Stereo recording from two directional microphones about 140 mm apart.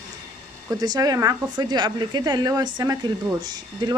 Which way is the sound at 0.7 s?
25° right (ahead or behind).